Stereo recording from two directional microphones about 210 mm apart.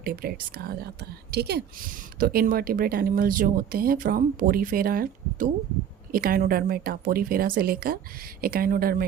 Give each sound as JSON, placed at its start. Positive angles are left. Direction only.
{"t": 0.0, "sound": "speech", "side_deg": -45}